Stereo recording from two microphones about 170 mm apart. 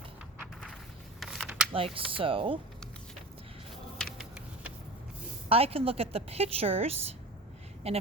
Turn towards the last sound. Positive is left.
turn(degrees=-35)  # may be behind; listen again after turning